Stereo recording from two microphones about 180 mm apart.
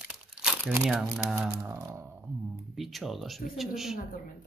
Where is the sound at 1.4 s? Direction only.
15° right (ahead or behind).